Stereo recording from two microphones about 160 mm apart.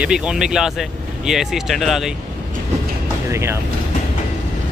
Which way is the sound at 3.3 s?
15° right (ahead or behind).